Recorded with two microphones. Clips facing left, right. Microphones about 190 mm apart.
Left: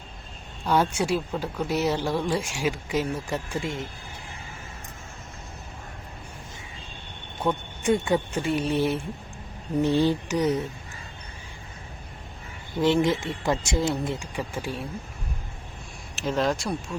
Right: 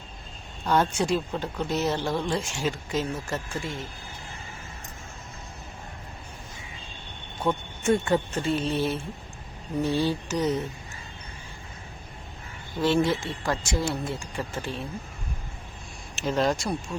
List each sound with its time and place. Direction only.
0.6 s a woman's voice: 10° left (ahead or behind)
7.4 s a woman's voice: 10° left (ahead or behind)
12.8 s speech: 15° left (ahead or behind)
16.1 s speech: centre (ahead or behind)